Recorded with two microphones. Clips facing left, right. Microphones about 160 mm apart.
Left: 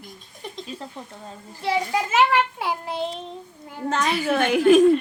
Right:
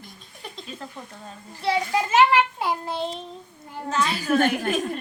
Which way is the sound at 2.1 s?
Centre (ahead or behind).